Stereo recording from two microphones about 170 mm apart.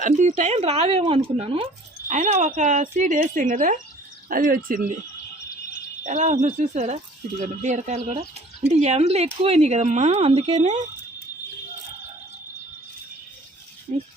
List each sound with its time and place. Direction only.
0.0 s speech: 45° right (ahead or behind)
2.0 s speech: 40° right (ahead or behind)
6.0 s speech: 45° right (ahead or behind)